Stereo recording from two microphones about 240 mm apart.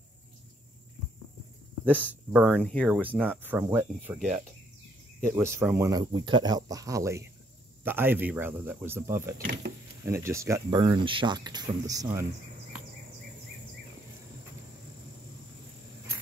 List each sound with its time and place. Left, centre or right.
2.3 s speech: centre
3.2 s speech: centre
5.3 s speech: centre
9.4 s speech: right
10.0 s speech: centre